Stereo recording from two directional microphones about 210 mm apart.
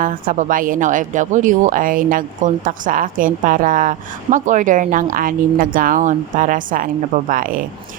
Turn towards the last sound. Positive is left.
turn(degrees=-40)  # may be behind; listen again after turning